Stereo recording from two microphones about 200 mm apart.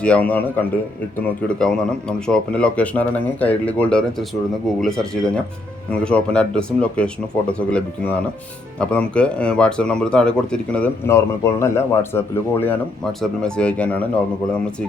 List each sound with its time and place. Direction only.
0.0 s speech: 5° left (ahead or behind)